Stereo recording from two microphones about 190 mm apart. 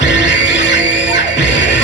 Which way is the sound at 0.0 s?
70° left (ahead or behind).